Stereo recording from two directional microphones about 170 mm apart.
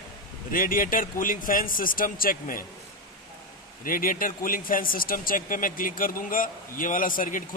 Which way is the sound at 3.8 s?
55° left (ahead or behind).